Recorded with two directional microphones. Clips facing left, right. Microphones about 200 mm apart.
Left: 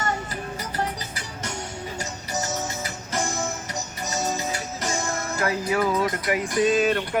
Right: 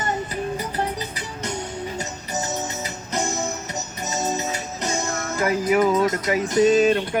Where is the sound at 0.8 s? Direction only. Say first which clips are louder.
Right 3 dB; 20° right (ahead or behind).